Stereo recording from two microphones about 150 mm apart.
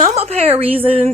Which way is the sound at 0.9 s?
40° right (ahead or behind).